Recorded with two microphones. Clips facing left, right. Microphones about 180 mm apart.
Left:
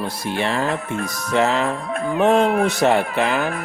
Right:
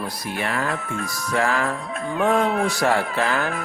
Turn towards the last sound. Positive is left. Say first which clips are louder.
# left 3 dB
turn(degrees=20)  # may be behind; listen again after turning